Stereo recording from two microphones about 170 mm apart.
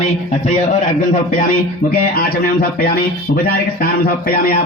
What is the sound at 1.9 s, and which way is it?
A man's voice, 60° left (ahead or behind).